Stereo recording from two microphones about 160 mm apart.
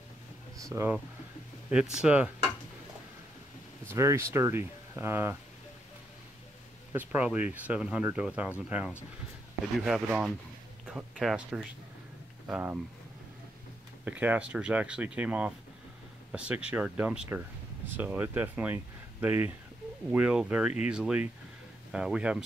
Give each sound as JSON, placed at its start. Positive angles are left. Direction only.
{"t": 0.6, "sound": "speech", "side_deg": -20}
{"t": 1.7, "sound": "speech", "side_deg": -5}
{"t": 3.9, "sound": "speech", "side_deg": -15}
{"t": 6.9, "sound": "speech", "side_deg": -10}
{"t": 14.0, "sound": "speech", "side_deg": -10}